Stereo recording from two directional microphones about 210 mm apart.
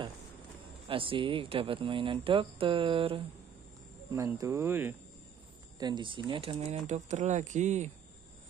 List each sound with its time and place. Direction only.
0.8 s speech: 25° right (ahead or behind)
4.1 s speech: 15° right (ahead or behind)
5.8 s speech: 20° right (ahead or behind)